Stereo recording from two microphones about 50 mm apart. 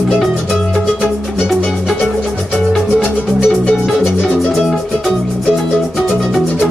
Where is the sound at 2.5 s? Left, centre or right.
Centre.